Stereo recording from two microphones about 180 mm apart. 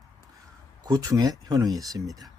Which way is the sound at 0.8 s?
20° right (ahead or behind).